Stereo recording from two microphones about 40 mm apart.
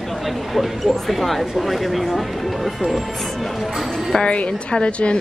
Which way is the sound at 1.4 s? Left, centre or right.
Centre.